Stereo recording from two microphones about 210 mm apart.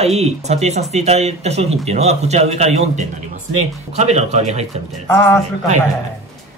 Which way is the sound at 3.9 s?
30° right (ahead or behind).